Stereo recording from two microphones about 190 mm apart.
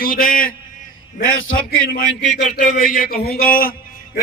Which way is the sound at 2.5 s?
50° left (ahead or behind).